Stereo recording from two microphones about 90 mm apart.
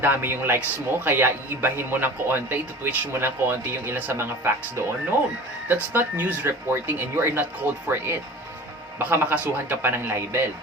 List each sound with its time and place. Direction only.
0.0 s speech: 25° right (ahead or behind)
5.6 s speech: 20° right (ahead or behind)